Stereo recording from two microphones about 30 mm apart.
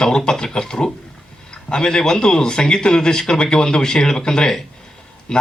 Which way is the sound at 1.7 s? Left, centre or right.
Left.